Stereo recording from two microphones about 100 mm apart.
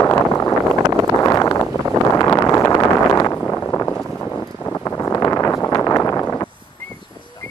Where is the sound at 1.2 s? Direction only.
35° left (ahead or behind).